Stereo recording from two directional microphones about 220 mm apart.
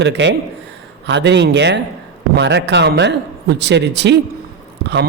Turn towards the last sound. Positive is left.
turn(degrees=-50)  # may be behind; listen again after turning